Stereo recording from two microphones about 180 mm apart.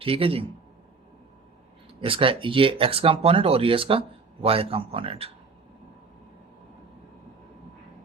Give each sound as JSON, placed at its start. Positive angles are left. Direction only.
{"t": 0.0, "sound": "speech", "side_deg": -30}
{"t": 2.0, "sound": "speech", "side_deg": -30}